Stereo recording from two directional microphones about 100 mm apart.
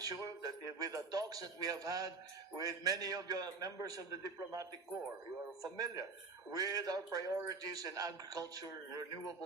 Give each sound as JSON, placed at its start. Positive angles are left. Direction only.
{"t": 0.0, "sound": "a man's voice", "side_deg": -40}
{"t": 5.7, "sound": "a man's voice", "side_deg": -40}